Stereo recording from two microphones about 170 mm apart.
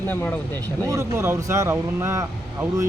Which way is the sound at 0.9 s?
15° right (ahead or behind).